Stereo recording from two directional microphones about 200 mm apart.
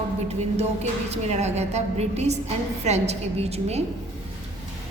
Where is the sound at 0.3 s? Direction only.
35° right (ahead or behind).